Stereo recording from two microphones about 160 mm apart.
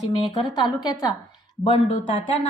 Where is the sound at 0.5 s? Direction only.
25° left (ahead or behind).